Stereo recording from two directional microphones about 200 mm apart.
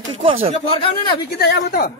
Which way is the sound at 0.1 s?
30° right (ahead or behind).